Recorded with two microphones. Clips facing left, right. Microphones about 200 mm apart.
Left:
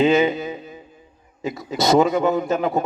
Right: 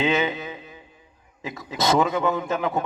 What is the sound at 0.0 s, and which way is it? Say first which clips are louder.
A man's voice: left 6 dB; 40° left (ahead or behind).